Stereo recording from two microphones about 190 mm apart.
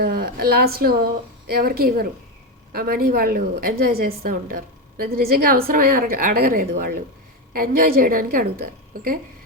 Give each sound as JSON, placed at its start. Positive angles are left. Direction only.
{"t": 0.0, "sound": "a woman's voice", "side_deg": -55}